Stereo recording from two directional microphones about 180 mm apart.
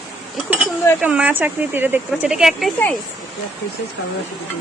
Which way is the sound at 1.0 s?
5° right (ahead or behind).